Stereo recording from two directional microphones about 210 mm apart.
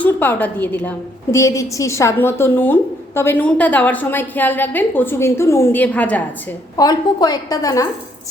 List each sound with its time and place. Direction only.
0.0 s a woman's voice: 10° left (ahead or behind)
6.7 s a woman's voice: 20° left (ahead or behind)